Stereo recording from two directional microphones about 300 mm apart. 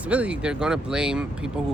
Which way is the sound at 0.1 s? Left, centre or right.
Centre.